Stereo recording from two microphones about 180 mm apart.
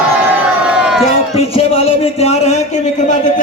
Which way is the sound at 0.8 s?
5° right (ahead or behind).